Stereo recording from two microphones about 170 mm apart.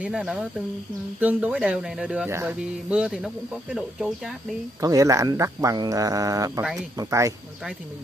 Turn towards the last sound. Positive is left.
turn(degrees=-20)  # may be behind; listen again after turning